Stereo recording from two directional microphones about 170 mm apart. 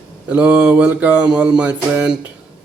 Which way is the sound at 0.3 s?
10° right (ahead or behind).